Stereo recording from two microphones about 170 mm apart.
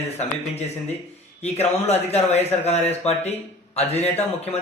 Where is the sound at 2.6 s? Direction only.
40° left (ahead or behind).